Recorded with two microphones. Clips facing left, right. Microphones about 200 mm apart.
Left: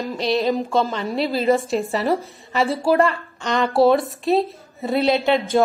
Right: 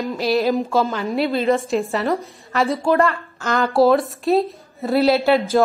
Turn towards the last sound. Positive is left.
turn(degrees=0)  # may be behind; listen again after turning